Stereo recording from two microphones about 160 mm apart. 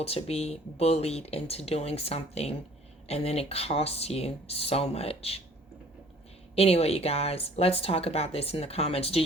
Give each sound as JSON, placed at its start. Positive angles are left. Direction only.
{"t": 0.0, "sound": "speech", "side_deg": 40}
{"t": 6.6, "sound": "speech", "side_deg": 40}